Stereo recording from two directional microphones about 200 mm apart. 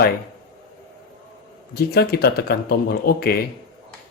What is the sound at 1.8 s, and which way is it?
Speech, 50° left (ahead or behind).